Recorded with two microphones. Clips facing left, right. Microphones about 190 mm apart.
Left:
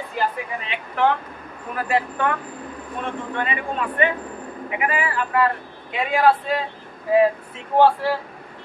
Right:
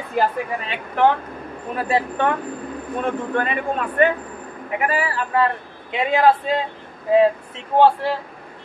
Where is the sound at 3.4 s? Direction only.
45° right (ahead or behind).